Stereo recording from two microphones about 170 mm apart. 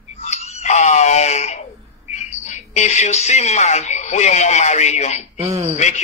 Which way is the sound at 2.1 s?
40° left (ahead or behind).